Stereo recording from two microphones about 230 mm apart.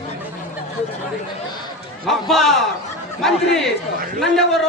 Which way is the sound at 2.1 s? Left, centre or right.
Centre.